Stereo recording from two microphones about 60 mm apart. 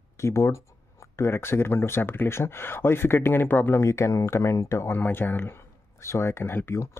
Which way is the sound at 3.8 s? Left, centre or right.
Left.